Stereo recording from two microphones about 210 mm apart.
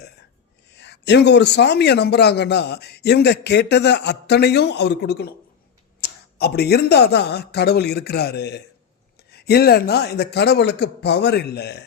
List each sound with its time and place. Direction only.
0.7 s a man's voice: 55° left (ahead or behind)